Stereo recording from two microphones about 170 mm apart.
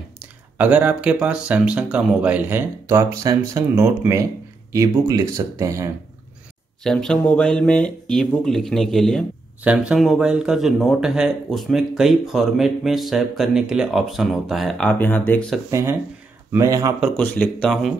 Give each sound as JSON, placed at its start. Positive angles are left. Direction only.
{"t": 0.2, "sound": "speech", "side_deg": -10}
{"t": 6.8, "sound": "speech", "side_deg": 5}
{"t": 15.7, "sound": "a man's voice", "side_deg": -15}
{"t": 17.2, "sound": "speech", "side_deg": 10}